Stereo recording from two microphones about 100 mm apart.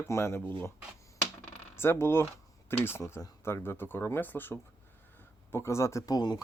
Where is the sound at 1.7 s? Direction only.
25° left (ahead or behind).